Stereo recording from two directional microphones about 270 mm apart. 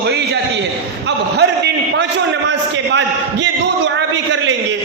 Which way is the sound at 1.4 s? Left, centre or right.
Right.